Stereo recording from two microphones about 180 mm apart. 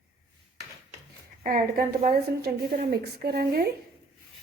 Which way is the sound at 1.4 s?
50° right (ahead or behind).